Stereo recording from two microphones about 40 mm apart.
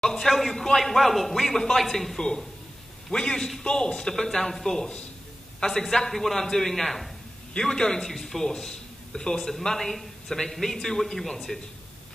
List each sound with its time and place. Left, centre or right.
0.0 s a man's voice: centre
3.1 s a man's voice: centre
7.5 s a man's voice: centre